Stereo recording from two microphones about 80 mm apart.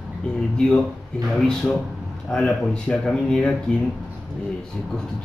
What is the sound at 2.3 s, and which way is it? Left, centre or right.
Speech, centre.